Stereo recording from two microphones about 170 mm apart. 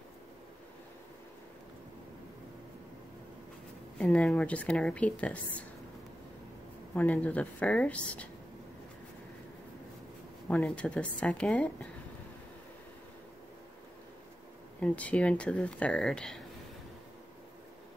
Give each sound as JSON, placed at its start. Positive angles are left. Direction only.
{"t": 4.0, "sound": "speech", "side_deg": 5}
{"t": 7.0, "sound": "speech", "side_deg": 10}
{"t": 10.5, "sound": "a woman's voice", "side_deg": 5}
{"t": 14.8, "sound": "speech", "side_deg": 10}